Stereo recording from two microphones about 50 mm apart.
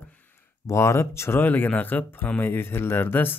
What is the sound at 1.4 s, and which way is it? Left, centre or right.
Speech, left.